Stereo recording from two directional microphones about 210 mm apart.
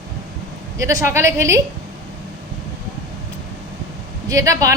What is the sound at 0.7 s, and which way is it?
Speech, 15° right (ahead or behind).